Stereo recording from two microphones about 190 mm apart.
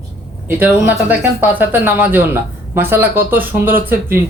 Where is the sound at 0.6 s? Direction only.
10° right (ahead or behind).